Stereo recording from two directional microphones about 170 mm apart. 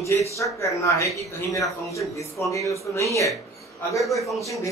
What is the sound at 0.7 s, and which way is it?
Speech, 20° left (ahead or behind).